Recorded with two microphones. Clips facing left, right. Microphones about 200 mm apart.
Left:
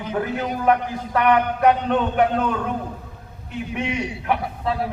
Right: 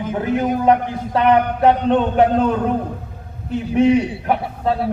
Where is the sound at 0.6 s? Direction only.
25° right (ahead or behind).